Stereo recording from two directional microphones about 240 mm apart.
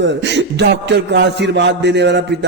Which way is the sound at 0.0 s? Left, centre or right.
Right.